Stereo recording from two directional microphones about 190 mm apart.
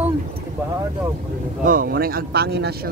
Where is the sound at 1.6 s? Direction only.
45° right (ahead or behind).